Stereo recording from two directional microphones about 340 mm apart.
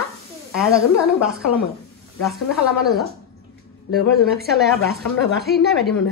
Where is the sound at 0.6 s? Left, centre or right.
Centre.